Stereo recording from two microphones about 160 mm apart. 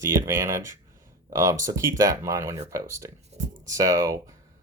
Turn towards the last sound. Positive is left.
turn(degrees=-20)  # may be behind; listen again after turning